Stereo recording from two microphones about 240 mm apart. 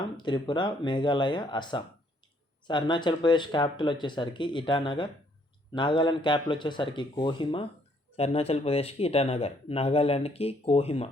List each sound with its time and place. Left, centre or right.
0.0 s speech: centre